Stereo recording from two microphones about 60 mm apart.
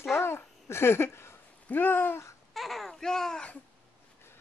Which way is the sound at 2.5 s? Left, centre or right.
Centre.